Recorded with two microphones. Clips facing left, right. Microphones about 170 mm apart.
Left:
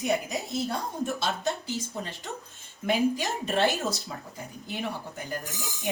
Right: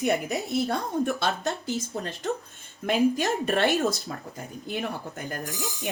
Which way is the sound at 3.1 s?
55° right (ahead or behind).